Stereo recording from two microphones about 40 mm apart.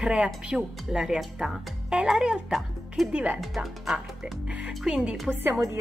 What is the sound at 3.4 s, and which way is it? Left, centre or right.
Speech, centre.